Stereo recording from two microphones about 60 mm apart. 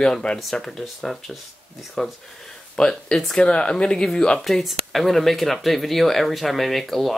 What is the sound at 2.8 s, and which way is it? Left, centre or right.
Speech, centre.